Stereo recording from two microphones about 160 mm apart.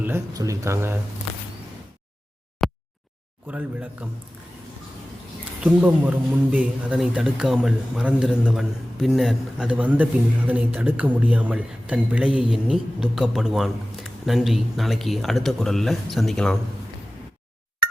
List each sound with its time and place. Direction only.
0.0 s speech: 15° right (ahead or behind)
2.6 s a sound: centre (ahead or behind)
4.0 s speech: 10° right (ahead or behind)
5.6 s speech: 10° right (ahead or behind)